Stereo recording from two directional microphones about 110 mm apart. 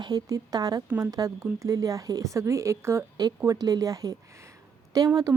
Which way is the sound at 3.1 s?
35° right (ahead or behind).